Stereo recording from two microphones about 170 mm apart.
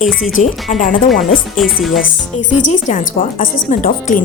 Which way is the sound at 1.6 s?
Centre (ahead or behind).